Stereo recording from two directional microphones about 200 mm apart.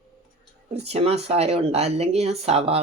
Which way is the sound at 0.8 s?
30° right (ahead or behind).